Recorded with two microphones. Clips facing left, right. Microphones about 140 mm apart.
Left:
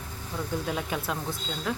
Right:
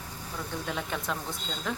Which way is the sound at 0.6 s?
5° left (ahead or behind).